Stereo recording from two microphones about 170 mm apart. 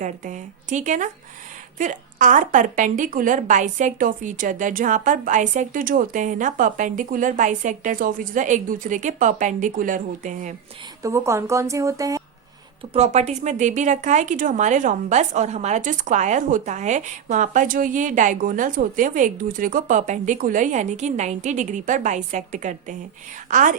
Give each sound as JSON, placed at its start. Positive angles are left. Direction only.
{"t": 0.0, "sound": "speech", "side_deg": -45}
{"t": 11.0, "sound": "a woman's voice", "side_deg": -15}
{"t": 12.9, "sound": "speech", "side_deg": -40}